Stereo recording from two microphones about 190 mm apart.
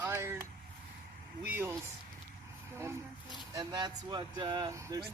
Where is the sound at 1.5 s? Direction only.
10° right (ahead or behind).